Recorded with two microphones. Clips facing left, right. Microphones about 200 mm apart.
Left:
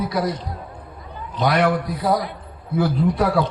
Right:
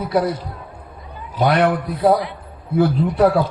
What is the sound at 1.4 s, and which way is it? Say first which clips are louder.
Speech: right 3 dB; 30° right (ahead or behind).